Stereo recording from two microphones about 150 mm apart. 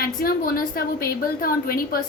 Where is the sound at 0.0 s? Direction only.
80° left.